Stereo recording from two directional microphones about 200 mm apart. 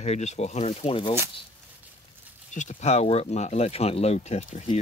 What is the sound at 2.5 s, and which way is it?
Speech, 35° left (ahead or behind).